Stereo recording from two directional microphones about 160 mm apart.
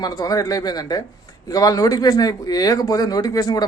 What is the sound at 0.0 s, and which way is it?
A man's voice, 25° left (ahead or behind).